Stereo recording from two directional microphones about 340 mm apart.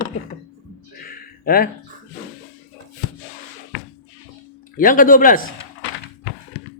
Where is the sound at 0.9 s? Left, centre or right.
Left.